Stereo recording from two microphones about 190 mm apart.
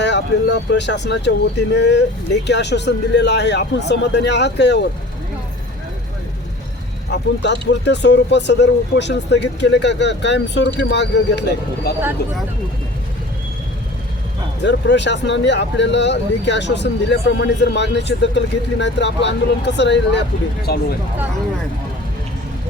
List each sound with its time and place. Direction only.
0.0 s speech: 65° left (ahead or behind)
7.1 s speech: 65° left (ahead or behind)
14.6 s speech: 65° left (ahead or behind)
20.7 s speech: 55° left (ahead or behind)